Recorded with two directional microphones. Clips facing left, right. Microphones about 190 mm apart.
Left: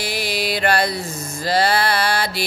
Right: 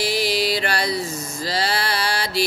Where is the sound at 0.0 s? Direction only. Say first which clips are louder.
Right 3 dB; 55° left (ahead or behind).